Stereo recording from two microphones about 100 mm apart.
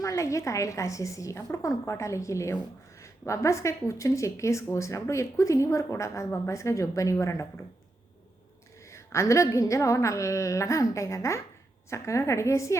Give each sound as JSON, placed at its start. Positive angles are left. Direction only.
{"t": 0.0, "sound": "speech", "side_deg": 30}
{"t": 8.9, "sound": "a woman's voice", "side_deg": 30}